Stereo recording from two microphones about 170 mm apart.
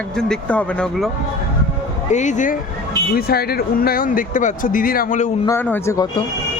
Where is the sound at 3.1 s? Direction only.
65° left (ahead or behind); by 5.3 s 45° left (ahead or behind).